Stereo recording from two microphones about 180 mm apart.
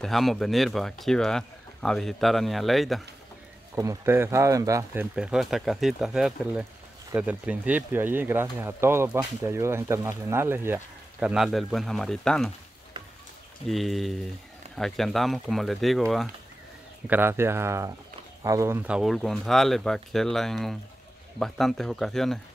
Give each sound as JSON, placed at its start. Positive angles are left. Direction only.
{"t": 0.0, "sound": "speech", "side_deg": 0}
{"t": 3.7, "sound": "speech", "side_deg": -15}
{"t": 5.1, "sound": "speech", "side_deg": -5}
{"t": 13.7, "sound": "speech", "side_deg": 0}
{"t": 17.1, "sound": "speech", "side_deg": -10}